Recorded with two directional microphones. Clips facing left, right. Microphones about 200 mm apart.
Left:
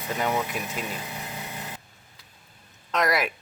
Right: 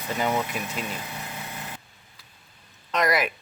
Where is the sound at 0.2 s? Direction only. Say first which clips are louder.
Right 1 dB; centre (ahead or behind).